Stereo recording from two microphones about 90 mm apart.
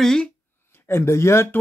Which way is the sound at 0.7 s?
30° left (ahead or behind).